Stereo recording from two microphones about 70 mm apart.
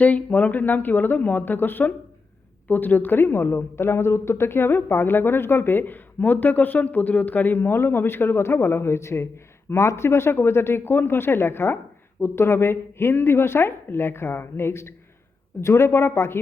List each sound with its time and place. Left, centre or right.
0.0 s a woman's voice: left